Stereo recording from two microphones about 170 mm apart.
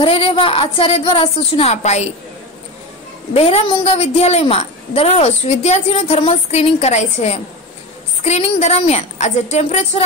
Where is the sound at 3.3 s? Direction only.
35° left (ahead or behind).